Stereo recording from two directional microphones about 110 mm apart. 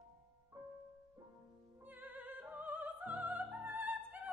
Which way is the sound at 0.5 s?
35° right (ahead or behind).